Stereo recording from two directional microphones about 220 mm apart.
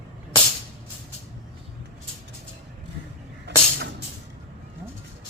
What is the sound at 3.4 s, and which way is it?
Music, 50° right (ahead or behind).